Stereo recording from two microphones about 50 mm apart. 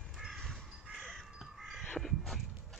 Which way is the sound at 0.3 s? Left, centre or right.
Centre.